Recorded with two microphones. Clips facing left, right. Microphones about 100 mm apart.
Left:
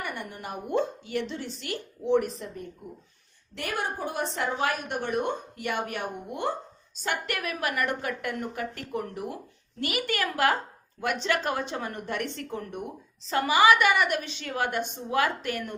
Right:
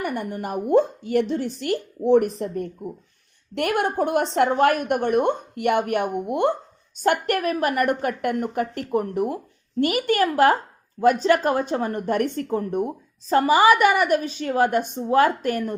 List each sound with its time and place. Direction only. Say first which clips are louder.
0.0 s a woman's voice: right 8 dB; 45° right (ahead or behind); by 6.5 s 65° right (ahead or behind)
6.9 s speech: right 10 dB; 55° right (ahead or behind)
9.8 s a woman's voice: right 9 dB; 40° right (ahead or behind)